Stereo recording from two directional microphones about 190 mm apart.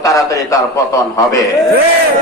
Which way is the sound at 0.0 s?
15° left (ahead or behind).